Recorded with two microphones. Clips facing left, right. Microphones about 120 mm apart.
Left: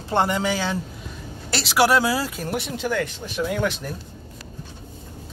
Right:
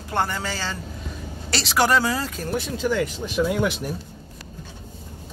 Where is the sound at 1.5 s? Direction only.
5° left (ahead or behind).